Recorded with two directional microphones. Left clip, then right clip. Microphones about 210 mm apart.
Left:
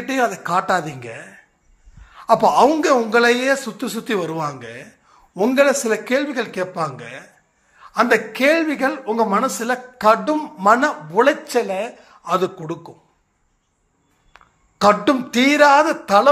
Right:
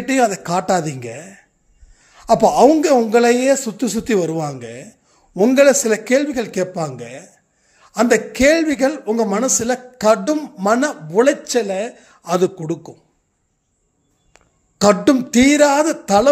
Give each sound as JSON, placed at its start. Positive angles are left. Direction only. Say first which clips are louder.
{"t": 0.0, "sound": "speech", "louder": "right 3 dB", "side_deg": -55}
{"t": 11.4, "sound": "speech", "louder": "right 1 dB", "side_deg": -40}
{"t": 14.3, "sound": "speech", "louder": "left 4 dB", "side_deg": -55}